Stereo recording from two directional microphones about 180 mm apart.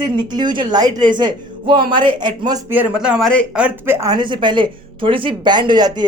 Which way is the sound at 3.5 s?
10° right (ahead or behind).